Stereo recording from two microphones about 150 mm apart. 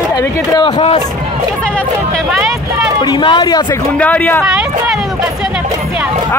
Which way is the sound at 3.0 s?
30° left (ahead or behind).